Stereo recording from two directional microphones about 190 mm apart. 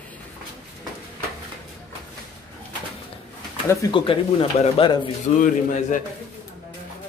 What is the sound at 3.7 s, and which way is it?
Speech, 20° left (ahead or behind).